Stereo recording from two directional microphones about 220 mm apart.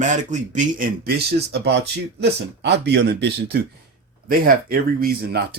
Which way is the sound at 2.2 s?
50° right (ahead or behind).